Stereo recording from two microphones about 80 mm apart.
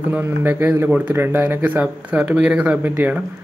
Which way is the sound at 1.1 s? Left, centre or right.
Right.